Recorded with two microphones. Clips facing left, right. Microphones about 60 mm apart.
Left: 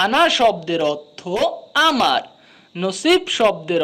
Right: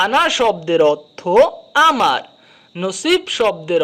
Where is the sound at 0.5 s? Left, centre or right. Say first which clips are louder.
Right 6 dB; right.